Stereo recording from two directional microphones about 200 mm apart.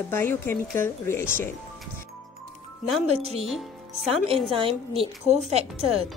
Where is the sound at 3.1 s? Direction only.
30° right (ahead or behind).